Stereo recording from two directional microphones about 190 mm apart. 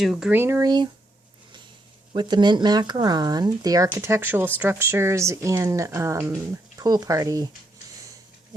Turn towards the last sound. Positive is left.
turn(degrees=-20)  # may be behind; listen again after turning